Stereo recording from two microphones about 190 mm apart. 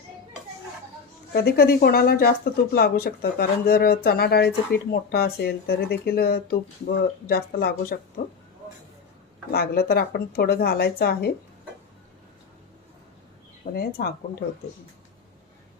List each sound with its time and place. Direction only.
1.3 s speech: 55° left (ahead or behind)
9.5 s a woman's voice: 55° left (ahead or behind)
13.6 s speech: 45° left (ahead or behind)